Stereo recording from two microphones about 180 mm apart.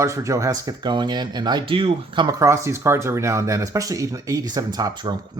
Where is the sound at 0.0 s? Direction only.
15° right (ahead or behind).